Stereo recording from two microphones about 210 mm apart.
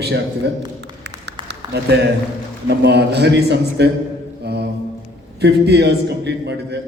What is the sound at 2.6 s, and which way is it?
A man's voice, 50° right (ahead or behind).